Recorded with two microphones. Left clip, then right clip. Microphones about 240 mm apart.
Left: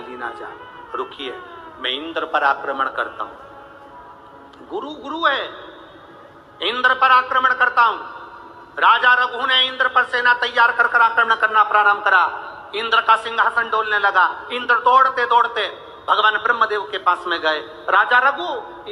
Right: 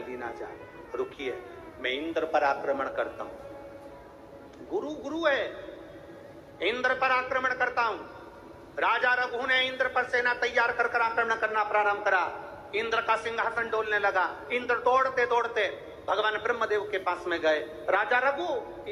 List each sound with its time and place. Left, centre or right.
0.0 s a sound: centre
0.9 s a man's voice: centre
4.7 s a man's voice: centre
6.6 s a man's voice: centre